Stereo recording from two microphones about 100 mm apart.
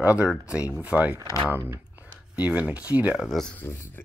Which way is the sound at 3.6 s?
25° left (ahead or behind).